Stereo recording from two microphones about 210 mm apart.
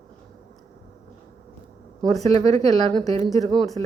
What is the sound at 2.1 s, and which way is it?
Speech, 30° right (ahead or behind).